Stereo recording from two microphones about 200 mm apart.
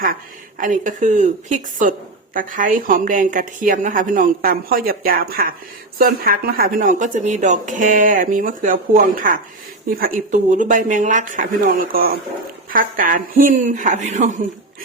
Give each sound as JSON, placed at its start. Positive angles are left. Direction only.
{"t": 0.6, "sound": "a woman's voice", "side_deg": -40}